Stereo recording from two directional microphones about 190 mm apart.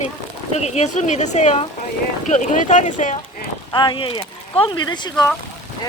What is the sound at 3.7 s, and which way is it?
Speech, 25° left (ahead or behind).